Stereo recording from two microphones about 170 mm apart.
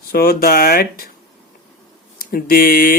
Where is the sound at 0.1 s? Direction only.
65° left (ahead or behind).